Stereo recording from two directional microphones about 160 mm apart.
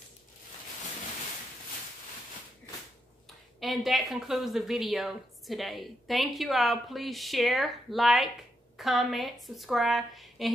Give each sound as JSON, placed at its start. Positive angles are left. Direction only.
{"t": 3.5, "sound": "a woman's voice", "side_deg": 0}